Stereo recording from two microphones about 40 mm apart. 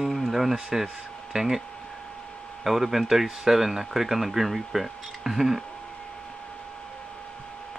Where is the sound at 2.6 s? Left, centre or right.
Centre.